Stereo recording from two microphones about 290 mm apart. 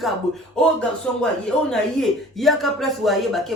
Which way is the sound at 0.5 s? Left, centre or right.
Centre.